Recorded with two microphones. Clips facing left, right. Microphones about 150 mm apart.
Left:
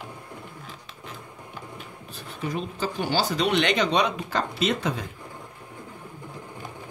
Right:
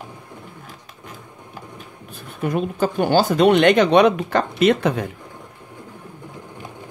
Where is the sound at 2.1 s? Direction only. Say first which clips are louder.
Right 7 dB; 55° right (ahead or behind).